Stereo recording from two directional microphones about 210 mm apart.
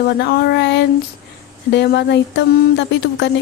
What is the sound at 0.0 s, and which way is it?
Speech, 50° left (ahead or behind).